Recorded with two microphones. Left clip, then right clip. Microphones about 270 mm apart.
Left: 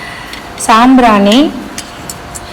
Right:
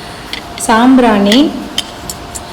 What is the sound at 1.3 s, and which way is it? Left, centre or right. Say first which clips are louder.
Dishes: left 1 dB; centre.